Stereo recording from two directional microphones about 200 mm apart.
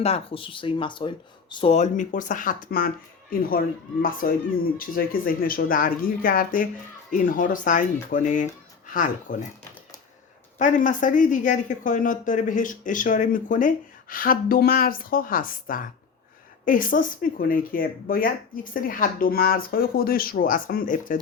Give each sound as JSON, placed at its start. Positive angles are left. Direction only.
{"t": 0.0, "sound": "speech", "side_deg": 30}
{"t": 10.6, "sound": "speech", "side_deg": 40}